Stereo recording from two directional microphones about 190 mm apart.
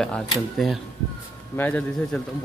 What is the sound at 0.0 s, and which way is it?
Speech, centre (ahead or behind).